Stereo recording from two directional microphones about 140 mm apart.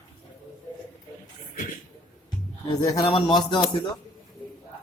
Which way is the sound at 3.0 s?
35° left (ahead or behind).